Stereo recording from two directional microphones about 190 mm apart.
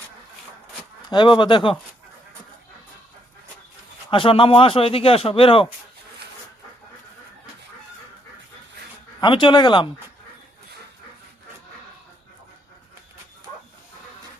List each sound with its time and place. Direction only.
1.1 s a man's voice: 25° left (ahead or behind)
4.1 s a man's voice: 30° left (ahead or behind)
9.2 s a man's voice: 25° left (ahead or behind)